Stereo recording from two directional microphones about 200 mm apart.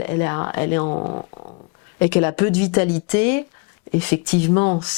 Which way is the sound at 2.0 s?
10° left (ahead or behind).